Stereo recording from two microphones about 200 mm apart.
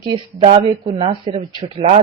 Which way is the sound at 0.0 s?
30° right (ahead or behind).